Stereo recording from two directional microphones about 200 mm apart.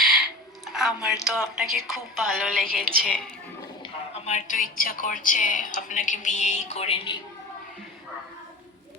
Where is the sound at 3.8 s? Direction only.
35° left (ahead or behind).